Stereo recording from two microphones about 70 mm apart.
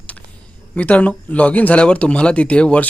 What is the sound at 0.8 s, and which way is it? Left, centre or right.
Speech, left.